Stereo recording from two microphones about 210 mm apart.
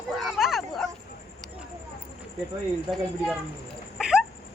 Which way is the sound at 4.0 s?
5° right (ahead or behind).